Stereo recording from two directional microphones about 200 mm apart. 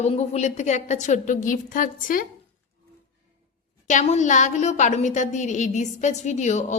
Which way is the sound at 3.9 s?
35° left (ahead or behind).